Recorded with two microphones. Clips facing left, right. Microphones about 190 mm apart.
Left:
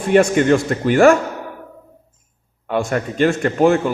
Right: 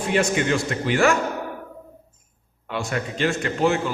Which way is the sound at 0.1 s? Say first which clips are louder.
Left 9 dB; 50° left (ahead or behind).